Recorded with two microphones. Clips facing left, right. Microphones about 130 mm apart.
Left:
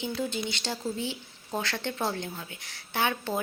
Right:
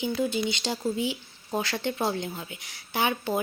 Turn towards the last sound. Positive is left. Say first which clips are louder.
# right 2 dB
turn(degrees=-10)  # may be behind; listen again after turning